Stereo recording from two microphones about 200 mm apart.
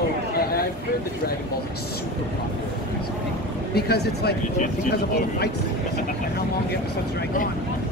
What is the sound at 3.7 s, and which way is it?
Speech, 55° left (ahead or behind).